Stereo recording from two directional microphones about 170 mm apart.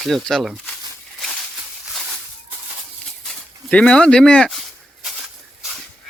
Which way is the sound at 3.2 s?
5° left (ahead or behind).